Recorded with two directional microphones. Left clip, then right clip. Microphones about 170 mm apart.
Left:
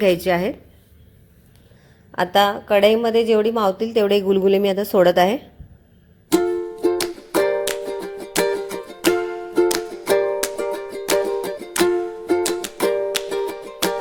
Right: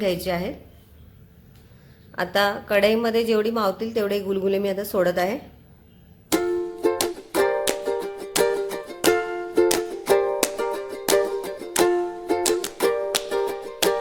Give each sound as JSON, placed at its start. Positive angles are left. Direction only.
{"t": 0.0, "sound": "a woman's voice", "side_deg": 35}
{"t": 2.1, "sound": "a woman's voice", "side_deg": 25}
{"t": 6.2, "sound": "music", "side_deg": 0}